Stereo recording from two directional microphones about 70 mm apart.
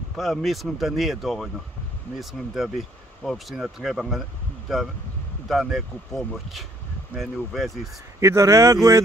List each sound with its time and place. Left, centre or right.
0.1 s speech: centre
3.2 s speech: centre
3.5 s speech: centre
8.2 s speech: right